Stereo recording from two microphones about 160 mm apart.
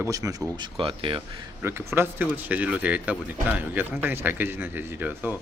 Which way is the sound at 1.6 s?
15° right (ahead or behind).